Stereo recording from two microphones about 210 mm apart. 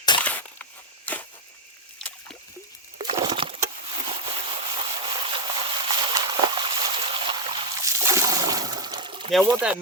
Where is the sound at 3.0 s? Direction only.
25° right (ahead or behind).